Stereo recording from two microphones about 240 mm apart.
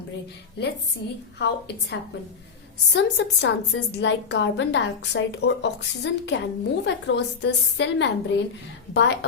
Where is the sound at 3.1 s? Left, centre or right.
Left.